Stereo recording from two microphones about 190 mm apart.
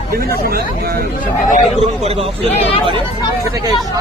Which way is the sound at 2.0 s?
30° right (ahead or behind).